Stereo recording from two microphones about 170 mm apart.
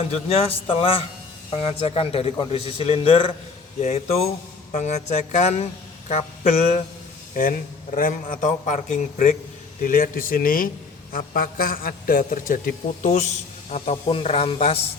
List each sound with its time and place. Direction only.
0.1 s a man's voice: 35° left (ahead or behind)
7.9 s a man's voice: 55° left (ahead or behind); by 14.8 s 35° left (ahead or behind)